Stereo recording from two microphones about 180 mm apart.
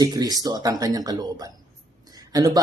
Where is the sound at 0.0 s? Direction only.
20° right (ahead or behind).